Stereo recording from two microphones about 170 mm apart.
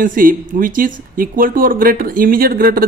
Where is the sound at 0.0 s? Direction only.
55° right (ahead or behind).